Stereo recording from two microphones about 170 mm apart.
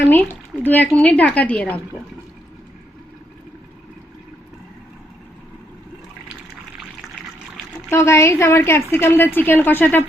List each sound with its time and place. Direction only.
0.1 s a woman's voice: 10° left (ahead or behind)
7.9 s a woman's voice: 15° left (ahead or behind)